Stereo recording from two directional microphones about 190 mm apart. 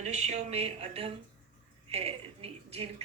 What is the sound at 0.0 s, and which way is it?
Speech, 35° right (ahead or behind).